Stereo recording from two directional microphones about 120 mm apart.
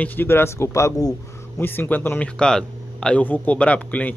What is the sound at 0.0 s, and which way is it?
Speech, 15° left (ahead or behind).